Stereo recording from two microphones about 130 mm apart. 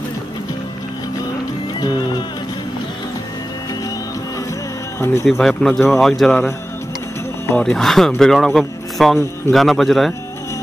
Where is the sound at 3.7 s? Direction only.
30° left (ahead or behind).